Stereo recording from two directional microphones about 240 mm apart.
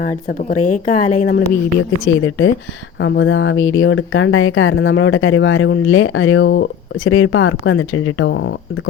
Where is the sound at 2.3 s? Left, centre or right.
Left.